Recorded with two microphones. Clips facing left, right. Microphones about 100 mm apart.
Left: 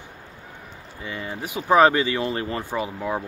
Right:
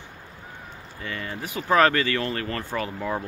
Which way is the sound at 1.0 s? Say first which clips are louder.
Left 1 dB; 15° left (ahead or behind).